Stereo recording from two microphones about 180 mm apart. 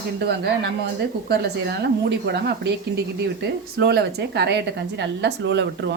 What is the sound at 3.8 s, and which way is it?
Speech, 65° right (ahead or behind).